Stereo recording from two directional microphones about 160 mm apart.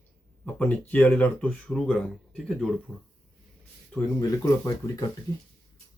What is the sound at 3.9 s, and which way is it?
Speech, 20° left (ahead or behind).